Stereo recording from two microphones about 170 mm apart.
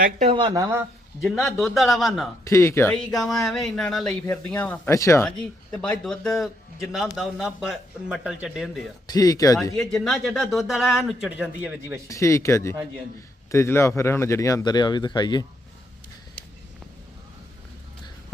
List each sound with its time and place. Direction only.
0.2 s speech: 30° right (ahead or behind); by 0.9 s 15° right (ahead or behind)
1.2 s speech: centre (ahead or behind)
2.4 s speech: 15° left (ahead or behind)
3.0 s speech: centre (ahead or behind); by 5.2 s 15° left (ahead or behind)
5.2 s speech: 5° left (ahead or behind)
9.0 s speech: 20° left (ahead or behind)
9.9 s speech: centre (ahead or behind)
12.0 s speech: 15° left (ahead or behind)